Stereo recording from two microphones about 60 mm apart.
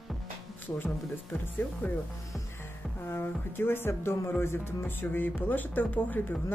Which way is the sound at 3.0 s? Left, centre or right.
Left.